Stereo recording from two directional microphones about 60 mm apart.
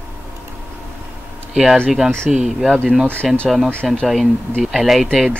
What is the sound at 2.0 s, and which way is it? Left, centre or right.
Speech, centre.